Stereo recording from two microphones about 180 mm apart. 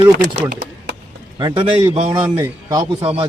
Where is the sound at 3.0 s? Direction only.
30° right (ahead or behind).